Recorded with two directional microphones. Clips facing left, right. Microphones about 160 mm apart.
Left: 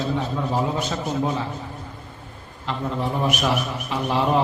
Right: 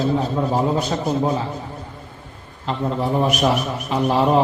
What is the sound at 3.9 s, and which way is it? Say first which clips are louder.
Speech: right 5 dB; 40° right (ahead or behind).